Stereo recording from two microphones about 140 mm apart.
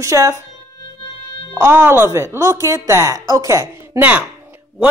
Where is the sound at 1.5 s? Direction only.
15° right (ahead or behind).